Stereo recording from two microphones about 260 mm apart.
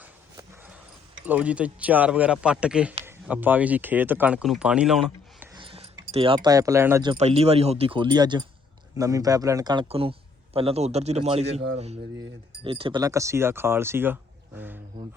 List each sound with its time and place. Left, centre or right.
0.0 s dog: centre
1.2 s speech: centre
5.5 s speech: right